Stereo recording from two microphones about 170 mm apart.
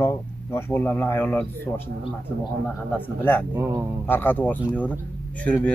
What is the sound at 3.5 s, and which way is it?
Speech, 15° right (ahead or behind).